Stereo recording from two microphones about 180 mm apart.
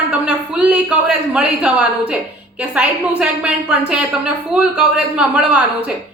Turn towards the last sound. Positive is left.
turn(degrees=-5)  # may be behind; listen again after turning